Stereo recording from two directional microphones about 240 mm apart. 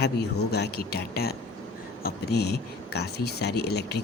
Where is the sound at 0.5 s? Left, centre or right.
Left.